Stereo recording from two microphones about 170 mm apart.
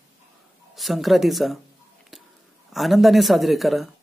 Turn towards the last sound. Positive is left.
turn(degrees=0)  # may be behind; listen again after turning